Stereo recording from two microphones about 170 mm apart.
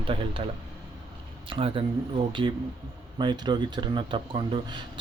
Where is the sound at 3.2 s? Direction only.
25° right (ahead or behind).